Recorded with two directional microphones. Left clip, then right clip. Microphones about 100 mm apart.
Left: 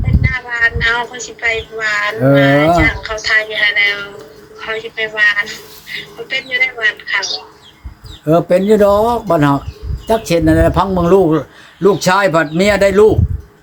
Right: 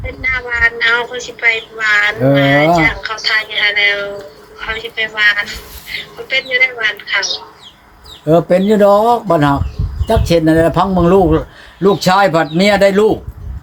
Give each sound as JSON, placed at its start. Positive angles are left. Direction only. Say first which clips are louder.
{"t": 0.2, "sound": "speech", "louder": "right 2 dB", "side_deg": 25}
{"t": 3.3, "sound": "a man's voice", "louder": "left 2 dB", "side_deg": 10}
{"t": 4.6, "sound": "a man's voice", "louder": "right 1 dB", "side_deg": 15}
{"t": 6.3, "sound": "a man's voice", "louder": "right 3 dB", "side_deg": 15}